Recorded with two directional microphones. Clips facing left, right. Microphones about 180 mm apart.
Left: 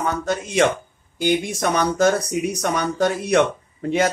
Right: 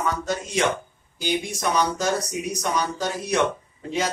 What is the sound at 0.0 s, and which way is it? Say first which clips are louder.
Speech: left 3 dB; 55° left (ahead or behind).